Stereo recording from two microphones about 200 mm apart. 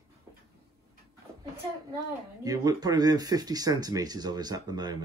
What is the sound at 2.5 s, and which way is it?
Speech, 20° right (ahead or behind).